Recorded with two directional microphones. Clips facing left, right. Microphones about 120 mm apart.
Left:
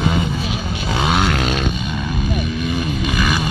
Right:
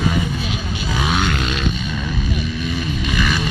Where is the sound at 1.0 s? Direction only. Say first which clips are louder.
Left 3 dB; 35° left (ahead or behind).